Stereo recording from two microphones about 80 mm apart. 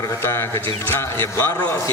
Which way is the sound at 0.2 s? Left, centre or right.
Left.